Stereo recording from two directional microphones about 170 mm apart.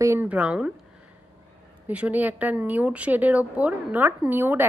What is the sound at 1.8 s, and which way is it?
Speech, 10° right (ahead or behind).